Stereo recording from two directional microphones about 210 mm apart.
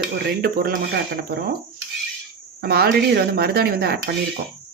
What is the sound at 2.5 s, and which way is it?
Speech, 50° right (ahead or behind).